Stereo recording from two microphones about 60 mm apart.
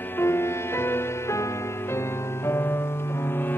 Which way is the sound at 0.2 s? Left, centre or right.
Left.